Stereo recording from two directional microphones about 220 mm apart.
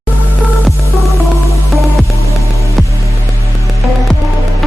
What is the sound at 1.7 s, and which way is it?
Music, centre (ahead or behind).